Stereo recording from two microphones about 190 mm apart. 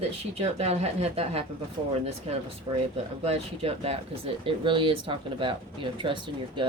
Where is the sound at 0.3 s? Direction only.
35° right (ahead or behind).